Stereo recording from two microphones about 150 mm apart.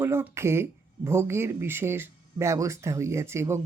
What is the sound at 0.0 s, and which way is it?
Speech, 15° right (ahead or behind).